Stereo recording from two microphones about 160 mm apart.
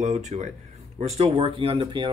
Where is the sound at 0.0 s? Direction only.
45° right (ahead or behind).